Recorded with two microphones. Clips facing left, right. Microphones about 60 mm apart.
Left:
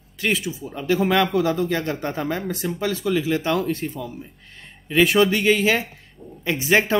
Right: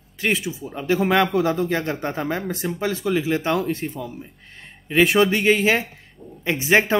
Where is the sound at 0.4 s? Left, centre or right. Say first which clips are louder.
Even; right.